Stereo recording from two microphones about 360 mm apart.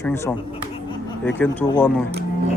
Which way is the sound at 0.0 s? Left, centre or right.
Centre.